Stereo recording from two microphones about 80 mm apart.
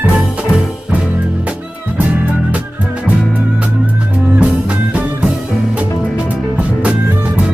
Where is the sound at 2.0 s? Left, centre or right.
Centre.